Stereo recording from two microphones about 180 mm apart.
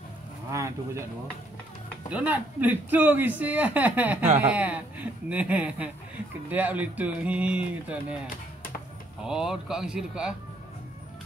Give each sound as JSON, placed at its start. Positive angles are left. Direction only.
{"t": 0.5, "sound": "speech", "side_deg": -15}
{"t": 2.0, "sound": "a man's voice", "side_deg": -10}
{"t": 9.2, "sound": "speech", "side_deg": -5}